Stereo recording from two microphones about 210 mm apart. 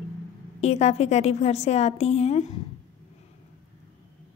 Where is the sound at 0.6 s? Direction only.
30° left (ahead or behind).